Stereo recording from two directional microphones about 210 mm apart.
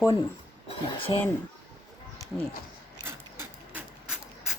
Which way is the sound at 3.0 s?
10° right (ahead or behind).